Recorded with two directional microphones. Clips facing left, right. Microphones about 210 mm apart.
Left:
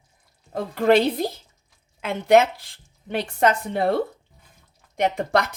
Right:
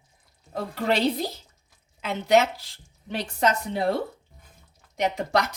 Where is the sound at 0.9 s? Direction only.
55° left (ahead or behind).